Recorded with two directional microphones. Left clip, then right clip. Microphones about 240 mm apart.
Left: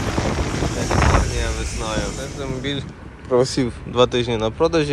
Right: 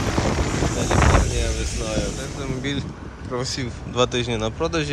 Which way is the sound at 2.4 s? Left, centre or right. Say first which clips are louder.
Left 2 dB; centre.